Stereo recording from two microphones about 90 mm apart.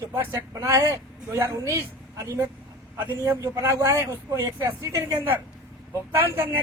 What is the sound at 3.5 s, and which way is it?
Speech, 35° right (ahead or behind).